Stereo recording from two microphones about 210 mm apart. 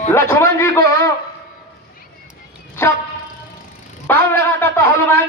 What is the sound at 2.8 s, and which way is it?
Vehicle, 10° left (ahead or behind).